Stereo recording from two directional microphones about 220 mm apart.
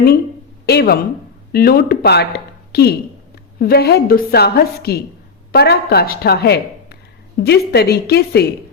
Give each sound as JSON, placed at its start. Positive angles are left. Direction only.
{"t": 0.6, "sound": "a woman's voice", "side_deg": 45}